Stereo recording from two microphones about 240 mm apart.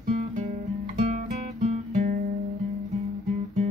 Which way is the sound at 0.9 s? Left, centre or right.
Right.